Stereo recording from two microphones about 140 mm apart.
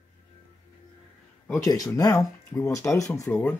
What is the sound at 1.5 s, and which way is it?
Speech, 25° left (ahead or behind).